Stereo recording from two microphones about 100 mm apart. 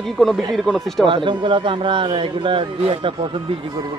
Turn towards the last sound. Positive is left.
turn(degrees=-60)  # may be behind; listen again after turning